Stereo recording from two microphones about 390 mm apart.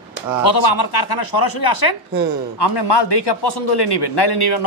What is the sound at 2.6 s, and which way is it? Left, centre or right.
A man's voice, left.